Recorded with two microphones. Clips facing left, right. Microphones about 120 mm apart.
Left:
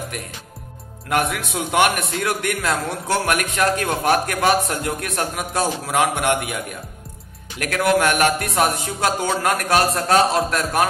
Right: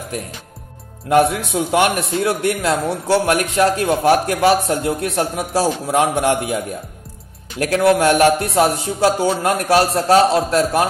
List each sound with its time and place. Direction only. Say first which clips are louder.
1.1 s a man's voice: right 7 dB; 30° right (ahead or behind)